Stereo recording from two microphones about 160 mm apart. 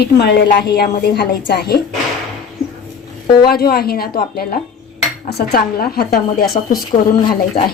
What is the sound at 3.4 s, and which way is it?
A woman's voice, 75° left (ahead or behind).